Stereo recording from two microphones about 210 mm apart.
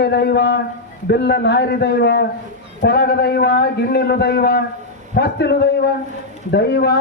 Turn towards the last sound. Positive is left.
turn(degrees=50)  # may be behind; listen again after turning